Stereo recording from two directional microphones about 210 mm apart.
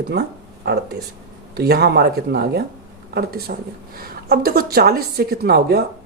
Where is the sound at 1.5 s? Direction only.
50° right (ahead or behind).